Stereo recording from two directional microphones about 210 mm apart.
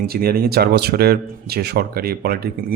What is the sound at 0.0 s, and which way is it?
Speech, 45° right (ahead or behind).